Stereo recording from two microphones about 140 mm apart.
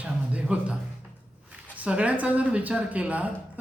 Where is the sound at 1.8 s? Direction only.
10° right (ahead or behind).